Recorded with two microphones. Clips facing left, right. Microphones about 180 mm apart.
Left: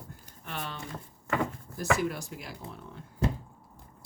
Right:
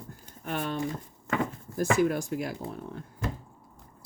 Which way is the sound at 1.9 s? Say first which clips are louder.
Right 7 dB; 50° right (ahead or behind).